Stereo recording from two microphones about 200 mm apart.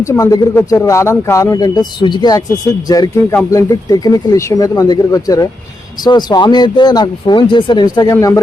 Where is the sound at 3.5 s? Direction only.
15° left (ahead or behind).